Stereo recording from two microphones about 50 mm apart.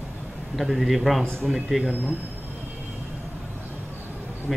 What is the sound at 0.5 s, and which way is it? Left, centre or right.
Speech, centre.